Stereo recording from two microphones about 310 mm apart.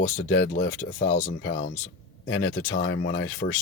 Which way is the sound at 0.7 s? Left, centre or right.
Left.